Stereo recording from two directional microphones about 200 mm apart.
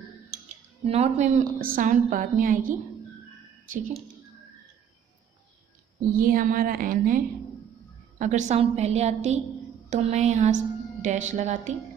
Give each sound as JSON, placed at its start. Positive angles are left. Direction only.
{"t": 0.8, "sound": "a woman's voice", "side_deg": -30}
{"t": 6.0, "sound": "a woman's voice", "side_deg": -45}